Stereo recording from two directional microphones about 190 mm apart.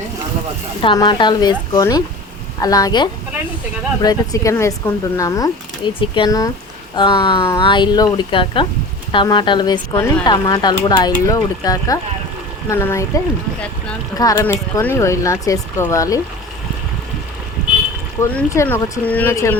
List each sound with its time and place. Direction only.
0.8 s speech: 25° left (ahead or behind)
17.6 s vehicle: 5° right (ahead or behind)
18.2 s speech: 15° left (ahead or behind)